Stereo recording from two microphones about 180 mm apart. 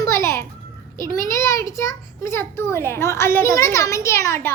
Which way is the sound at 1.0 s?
15° left (ahead or behind).